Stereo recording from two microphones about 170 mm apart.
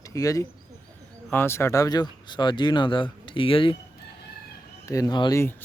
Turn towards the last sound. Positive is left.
turn(degrees=10)  # may be behind; listen again after turning